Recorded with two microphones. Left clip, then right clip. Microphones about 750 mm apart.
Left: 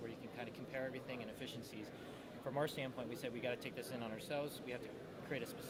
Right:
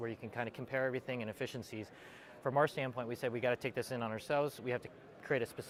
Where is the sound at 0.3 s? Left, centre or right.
Right.